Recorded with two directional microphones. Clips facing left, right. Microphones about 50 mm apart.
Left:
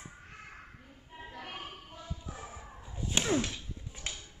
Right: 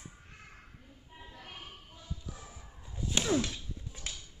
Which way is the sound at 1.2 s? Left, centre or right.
Left.